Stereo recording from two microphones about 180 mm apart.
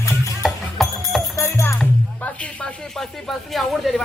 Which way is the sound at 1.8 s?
5° left (ahead or behind).